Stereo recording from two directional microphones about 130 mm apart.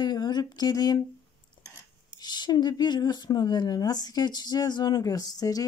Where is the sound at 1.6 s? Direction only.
35° left (ahead or behind).